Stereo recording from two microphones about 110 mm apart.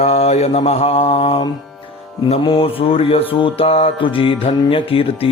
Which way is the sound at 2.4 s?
55° left (ahead or behind).